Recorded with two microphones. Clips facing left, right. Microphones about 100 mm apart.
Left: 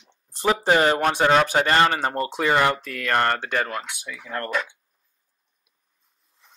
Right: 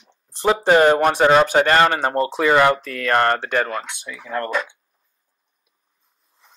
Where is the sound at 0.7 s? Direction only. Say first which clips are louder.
Right 6 dB; 40° right (ahead or behind).